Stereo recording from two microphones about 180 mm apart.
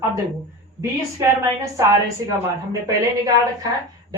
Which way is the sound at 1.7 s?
15° right (ahead or behind).